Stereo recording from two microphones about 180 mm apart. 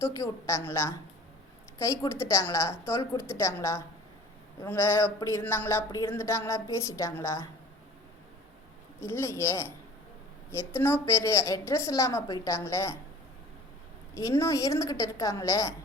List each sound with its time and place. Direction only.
0.0 s speech: 15° left (ahead or behind)
9.0 s speech: 15° left (ahead or behind)
14.2 s speech: 15° left (ahead or behind)